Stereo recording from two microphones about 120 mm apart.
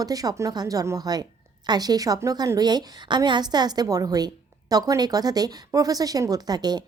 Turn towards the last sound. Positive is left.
turn(degrees=-35)  # may be behind; listen again after turning